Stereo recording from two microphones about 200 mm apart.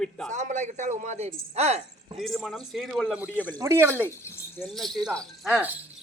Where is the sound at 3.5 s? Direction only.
15° right (ahead or behind).